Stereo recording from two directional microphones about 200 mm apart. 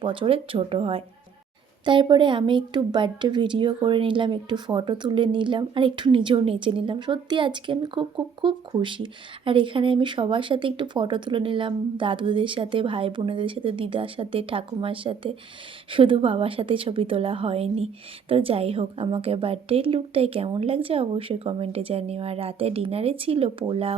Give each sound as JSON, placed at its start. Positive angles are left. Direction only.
{"t": 0.0, "sound": "a woman's voice", "side_deg": -25}